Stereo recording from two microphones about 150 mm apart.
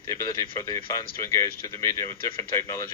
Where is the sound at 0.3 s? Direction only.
35° left (ahead or behind).